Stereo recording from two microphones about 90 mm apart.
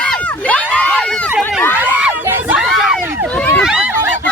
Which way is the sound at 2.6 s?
5° right (ahead or behind).